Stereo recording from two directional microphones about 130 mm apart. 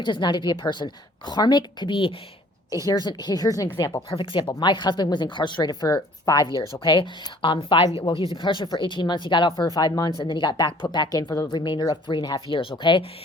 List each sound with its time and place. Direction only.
0.0 s speech: 35° left (ahead or behind)
4.1 s speech: 40° left (ahead or behind)